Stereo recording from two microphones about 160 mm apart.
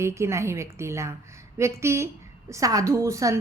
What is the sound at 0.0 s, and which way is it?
A woman's voice, 15° right (ahead or behind).